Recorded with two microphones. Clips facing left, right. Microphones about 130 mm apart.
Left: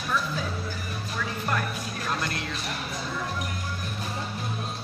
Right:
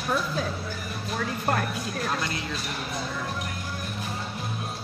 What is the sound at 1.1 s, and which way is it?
Music, 45° right (ahead or behind).